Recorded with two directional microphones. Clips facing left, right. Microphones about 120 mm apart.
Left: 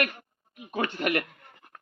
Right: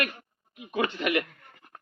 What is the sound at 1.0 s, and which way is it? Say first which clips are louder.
Speech: left 1 dB; 50° left (ahead or behind).